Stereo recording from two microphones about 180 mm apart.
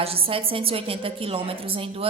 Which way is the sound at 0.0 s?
30° right (ahead or behind).